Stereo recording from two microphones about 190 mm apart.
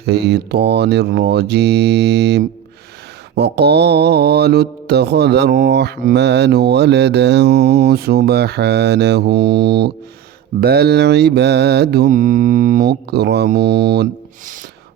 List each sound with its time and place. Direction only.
0.0 s mantra: 60° right (ahead or behind)